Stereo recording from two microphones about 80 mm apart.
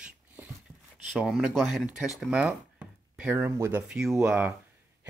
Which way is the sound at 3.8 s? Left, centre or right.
Centre.